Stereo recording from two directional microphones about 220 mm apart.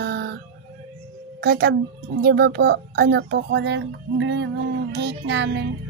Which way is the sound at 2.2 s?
50° right (ahead or behind).